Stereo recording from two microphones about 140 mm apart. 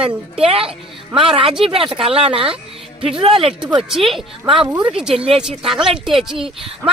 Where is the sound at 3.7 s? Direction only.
Centre (ahead or behind).